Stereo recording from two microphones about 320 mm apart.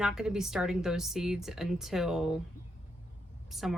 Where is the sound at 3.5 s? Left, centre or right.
Centre.